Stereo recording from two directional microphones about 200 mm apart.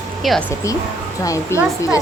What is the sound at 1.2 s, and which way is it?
Speech, 15° left (ahead or behind).